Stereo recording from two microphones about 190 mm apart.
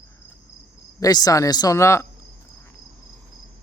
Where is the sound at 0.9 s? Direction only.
20° left (ahead or behind).